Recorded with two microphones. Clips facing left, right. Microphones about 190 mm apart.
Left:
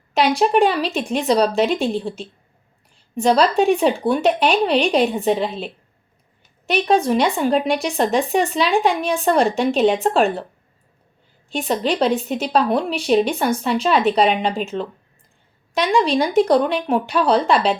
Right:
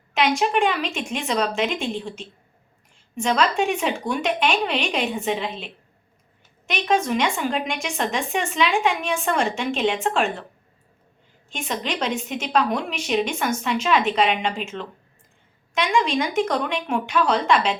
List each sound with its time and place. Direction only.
0.1 s speech: 35° left (ahead or behind)
11.4 s speech: 35° left (ahead or behind)